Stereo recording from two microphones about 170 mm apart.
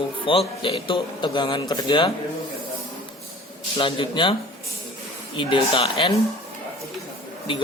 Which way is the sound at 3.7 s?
30° left (ahead or behind).